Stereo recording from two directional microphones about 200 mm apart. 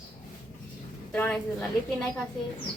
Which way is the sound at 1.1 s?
5° left (ahead or behind).